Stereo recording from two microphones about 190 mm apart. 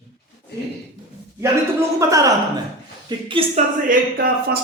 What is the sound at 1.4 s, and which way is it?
A man's voice, 15° right (ahead or behind).